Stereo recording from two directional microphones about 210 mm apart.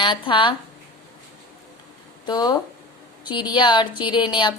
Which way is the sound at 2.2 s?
20° left (ahead or behind).